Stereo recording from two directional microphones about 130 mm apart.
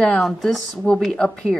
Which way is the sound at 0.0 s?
5° left (ahead or behind).